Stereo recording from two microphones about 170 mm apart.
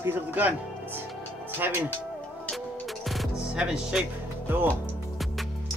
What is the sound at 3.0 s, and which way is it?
Music, 5° right (ahead or behind).